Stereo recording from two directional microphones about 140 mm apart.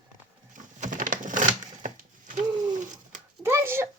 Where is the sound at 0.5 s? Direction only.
65° right (ahead or behind).